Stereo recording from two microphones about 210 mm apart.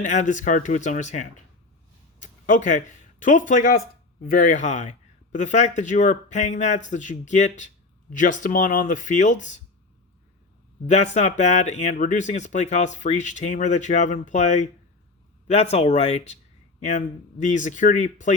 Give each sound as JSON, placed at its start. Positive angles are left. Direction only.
{"t": 0.0, "sound": "speech", "side_deg": 35}
{"t": 10.8, "sound": "speech", "side_deg": 35}
{"t": 17.4, "sound": "speech", "side_deg": 35}